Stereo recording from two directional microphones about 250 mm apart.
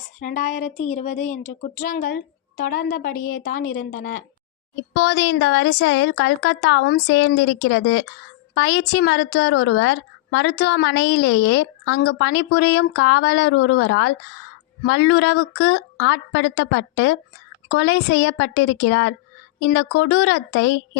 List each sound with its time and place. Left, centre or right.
0.2 s a woman's voice: left
4.9 s a woman's voice: left